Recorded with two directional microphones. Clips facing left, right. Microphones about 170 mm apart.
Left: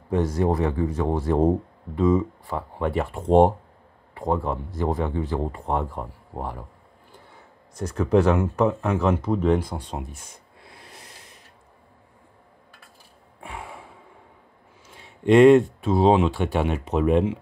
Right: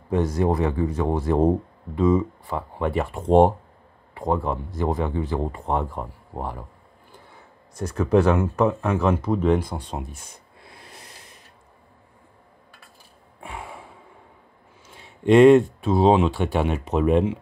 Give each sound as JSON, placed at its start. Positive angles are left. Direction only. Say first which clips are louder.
{"t": 0.1, "sound": "speech", "louder": "right 1 dB", "side_deg": -15}
{"t": 7.7, "sound": "speech", "louder": "right 1 dB", "side_deg": -5}
{"t": 15.2, "sound": "speech", "louder": "right 1 dB", "side_deg": -30}